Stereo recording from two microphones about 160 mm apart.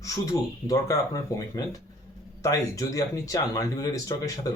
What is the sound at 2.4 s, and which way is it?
Speech, 20° left (ahead or behind).